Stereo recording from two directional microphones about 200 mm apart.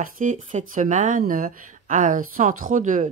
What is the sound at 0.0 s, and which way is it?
Speech, 40° right (ahead or behind).